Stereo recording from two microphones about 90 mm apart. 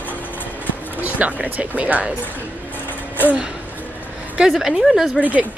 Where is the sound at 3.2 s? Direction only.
15° right (ahead or behind).